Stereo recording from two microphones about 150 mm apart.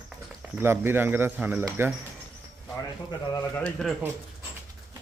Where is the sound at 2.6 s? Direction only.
20° left (ahead or behind).